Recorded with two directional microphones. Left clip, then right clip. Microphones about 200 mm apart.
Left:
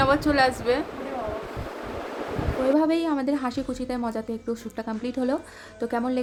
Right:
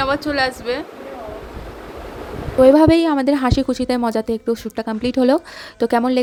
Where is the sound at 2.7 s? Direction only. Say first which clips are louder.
Right 10 dB; 40° right (ahead or behind).